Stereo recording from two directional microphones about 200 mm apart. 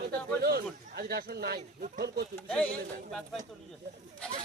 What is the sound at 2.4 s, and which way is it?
Speech, 5° left (ahead or behind).